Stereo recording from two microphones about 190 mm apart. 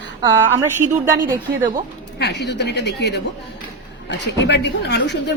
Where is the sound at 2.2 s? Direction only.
65° left (ahead or behind).